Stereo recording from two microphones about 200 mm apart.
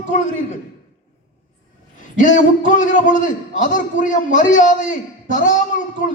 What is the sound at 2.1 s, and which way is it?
A man's voice, 40° left (ahead or behind).